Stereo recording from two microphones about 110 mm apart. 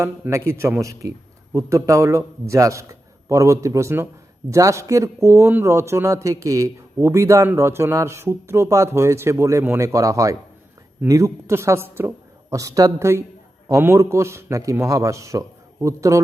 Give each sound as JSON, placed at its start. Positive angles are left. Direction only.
{"t": 0.0, "sound": "a man's voice", "side_deg": -25}